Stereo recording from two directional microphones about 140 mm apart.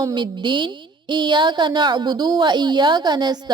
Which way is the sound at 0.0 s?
35° right (ahead or behind).